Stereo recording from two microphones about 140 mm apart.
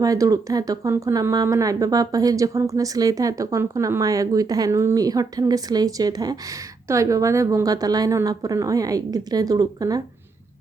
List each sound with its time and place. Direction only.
0.0 s speech: 25° right (ahead or behind)